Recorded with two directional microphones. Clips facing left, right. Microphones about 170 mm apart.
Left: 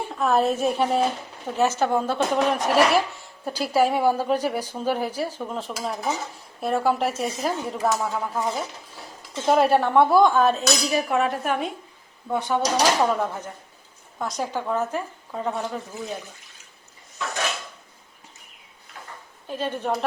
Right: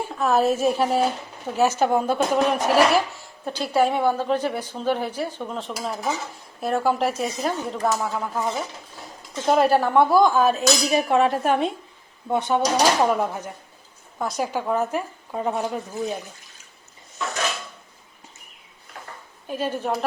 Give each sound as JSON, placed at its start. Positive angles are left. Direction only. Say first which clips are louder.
{"t": 0.1, "sound": "a woman's voice", "louder": "right 1 dB", "side_deg": 0}
{"t": 10.8, "sound": "speech", "louder": "right 4 dB", "side_deg": -25}
{"t": 13.0, "sound": "a woman's voice", "louder": "right 2 dB", "side_deg": -10}
{"t": 19.5, "sound": "speech", "louder": "right 1 dB", "side_deg": -10}